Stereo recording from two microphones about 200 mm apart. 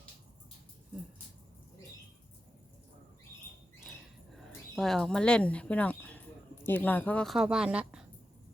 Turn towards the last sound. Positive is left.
turn(degrees=-5)  # may be behind; listen again after turning